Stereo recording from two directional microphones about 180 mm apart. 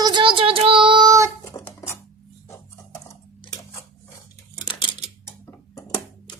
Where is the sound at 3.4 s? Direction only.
20° left (ahead or behind).